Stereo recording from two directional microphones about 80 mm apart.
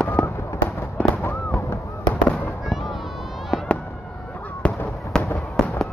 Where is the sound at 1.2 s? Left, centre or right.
Left.